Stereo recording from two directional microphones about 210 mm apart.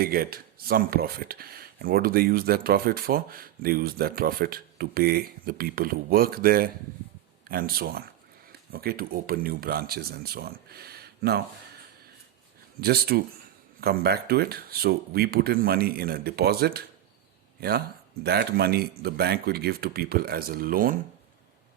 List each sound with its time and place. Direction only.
0.0 s speech: 45° right (ahead or behind)
12.8 s speech: 50° right (ahead or behind)